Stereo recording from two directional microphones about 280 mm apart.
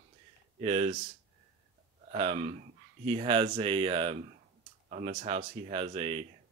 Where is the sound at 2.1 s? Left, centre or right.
Right.